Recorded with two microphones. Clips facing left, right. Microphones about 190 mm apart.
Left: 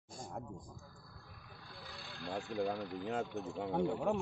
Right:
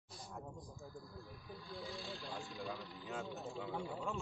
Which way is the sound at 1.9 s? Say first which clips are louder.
Left 5 dB; 60° left (ahead or behind).